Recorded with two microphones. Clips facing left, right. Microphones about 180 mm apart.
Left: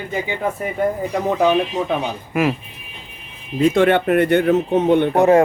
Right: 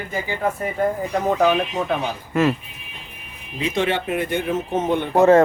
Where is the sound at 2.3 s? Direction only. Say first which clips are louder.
Even; 10° left (ahead or behind).